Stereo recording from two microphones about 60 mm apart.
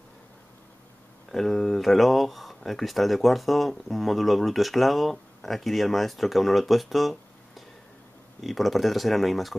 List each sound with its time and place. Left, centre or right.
1.3 s speech: centre